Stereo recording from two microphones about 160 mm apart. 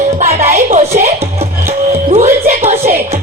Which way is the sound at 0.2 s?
45° right (ahead or behind).